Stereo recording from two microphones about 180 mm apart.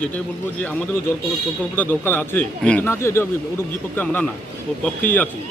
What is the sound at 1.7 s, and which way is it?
Speech, 10° left (ahead or behind).